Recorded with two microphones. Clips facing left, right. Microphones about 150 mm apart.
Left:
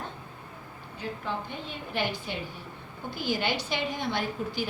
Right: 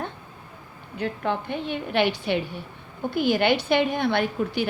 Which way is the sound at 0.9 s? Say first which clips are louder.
Right 7 dB; 65° right (ahead or behind).